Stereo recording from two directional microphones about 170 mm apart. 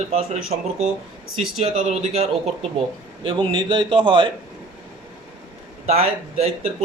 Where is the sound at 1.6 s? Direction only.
40° right (ahead or behind).